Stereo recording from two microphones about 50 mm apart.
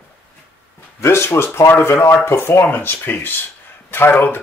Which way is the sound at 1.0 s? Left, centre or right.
Left.